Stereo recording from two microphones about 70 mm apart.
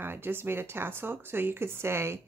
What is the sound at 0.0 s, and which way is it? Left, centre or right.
Speech, right.